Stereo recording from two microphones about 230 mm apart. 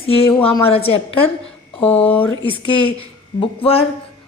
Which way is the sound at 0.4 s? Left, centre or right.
Left.